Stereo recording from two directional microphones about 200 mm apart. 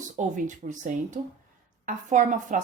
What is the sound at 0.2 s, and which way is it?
A woman's voice, 40° right (ahead or behind).